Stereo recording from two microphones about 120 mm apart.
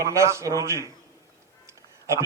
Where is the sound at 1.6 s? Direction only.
25° right (ahead or behind).